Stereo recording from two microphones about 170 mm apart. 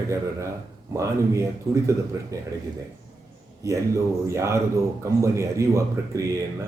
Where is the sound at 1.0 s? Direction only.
15° right (ahead or behind).